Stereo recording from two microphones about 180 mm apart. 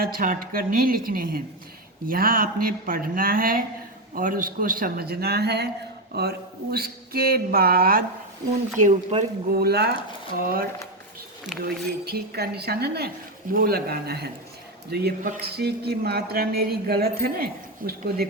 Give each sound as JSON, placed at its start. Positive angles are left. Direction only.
{"t": 0.0, "sound": "speech", "side_deg": -50}
{"t": 8.8, "sound": "speech", "side_deg": -40}
{"t": 9.5, "sound": "speech", "side_deg": -60}
{"t": 12.0, "sound": "speech", "side_deg": -60}